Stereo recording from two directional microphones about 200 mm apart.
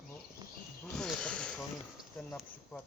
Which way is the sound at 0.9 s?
5° left (ahead or behind).